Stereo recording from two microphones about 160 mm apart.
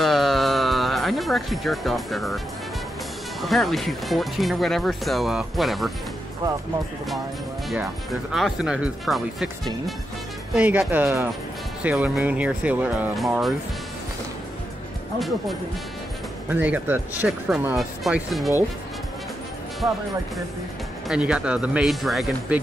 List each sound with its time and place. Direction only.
0.0 s music: centre (ahead or behind)
3.3 s speech: centre (ahead or behind)
7.8 s speech: centre (ahead or behind)
10.5 s speech: 10° right (ahead or behind)
15.1 s speech: centre (ahead or behind)
16.4 s speech: 10° right (ahead or behind)
19.8 s speech: 20° right (ahead or behind)
21.1 s speech: 5° right (ahead or behind)